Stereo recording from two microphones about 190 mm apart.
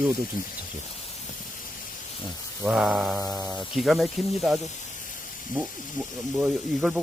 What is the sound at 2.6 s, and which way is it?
Speech, centre (ahead or behind).